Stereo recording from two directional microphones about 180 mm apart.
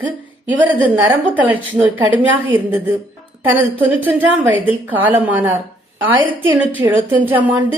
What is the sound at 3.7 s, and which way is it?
A woman's voice, 10° right (ahead or behind).